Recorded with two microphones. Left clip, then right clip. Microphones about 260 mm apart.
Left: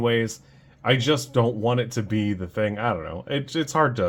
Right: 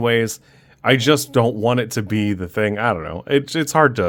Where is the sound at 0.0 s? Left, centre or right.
Right.